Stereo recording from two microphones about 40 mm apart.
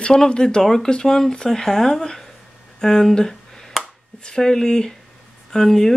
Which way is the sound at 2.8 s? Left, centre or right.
Centre.